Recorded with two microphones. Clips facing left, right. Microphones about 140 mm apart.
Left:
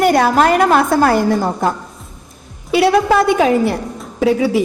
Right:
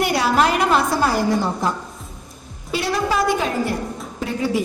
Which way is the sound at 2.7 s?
65° left (ahead or behind).